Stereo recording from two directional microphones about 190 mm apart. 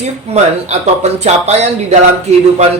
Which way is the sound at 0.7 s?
35° right (ahead or behind).